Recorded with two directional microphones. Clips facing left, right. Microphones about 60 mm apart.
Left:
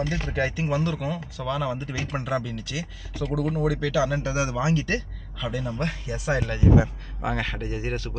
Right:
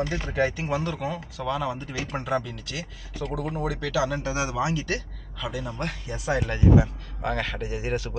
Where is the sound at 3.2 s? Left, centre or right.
Right.